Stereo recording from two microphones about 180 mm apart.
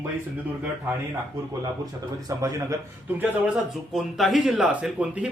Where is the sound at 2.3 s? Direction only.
20° right (ahead or behind).